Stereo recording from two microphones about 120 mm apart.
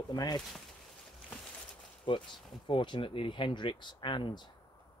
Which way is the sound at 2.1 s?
45° left (ahead or behind).